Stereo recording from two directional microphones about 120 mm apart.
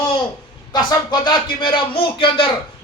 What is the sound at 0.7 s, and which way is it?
Speech, 35° left (ahead or behind).